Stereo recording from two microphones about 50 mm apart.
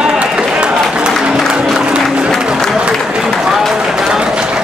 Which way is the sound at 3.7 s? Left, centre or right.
Centre.